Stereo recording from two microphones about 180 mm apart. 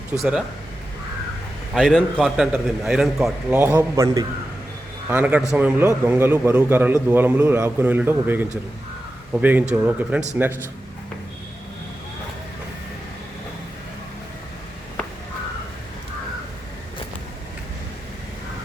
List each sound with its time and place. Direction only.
0.2 s a man's voice: centre (ahead or behind)
1.7 s a man's voice: 5° left (ahead or behind)
3.6 s a man's voice: 10° right (ahead or behind)
5.0 s a man's voice: 10° right (ahead or behind)